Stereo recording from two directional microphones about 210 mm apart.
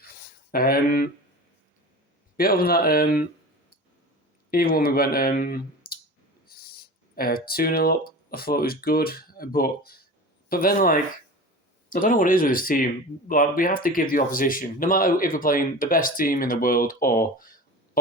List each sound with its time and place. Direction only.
0.5 s speech: 45° left (ahead or behind)
2.3 s speech: 45° left (ahead or behind)
4.5 s speech: 45° left (ahead or behind)